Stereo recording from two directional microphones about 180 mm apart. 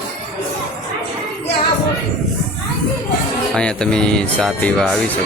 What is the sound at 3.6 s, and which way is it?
Speech, 5° left (ahead or behind).